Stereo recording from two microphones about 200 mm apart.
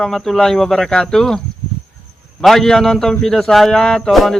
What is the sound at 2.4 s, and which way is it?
A man's voice, centre (ahead or behind).